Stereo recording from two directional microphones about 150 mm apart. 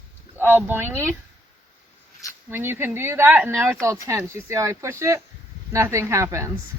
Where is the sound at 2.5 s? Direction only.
15° right (ahead or behind).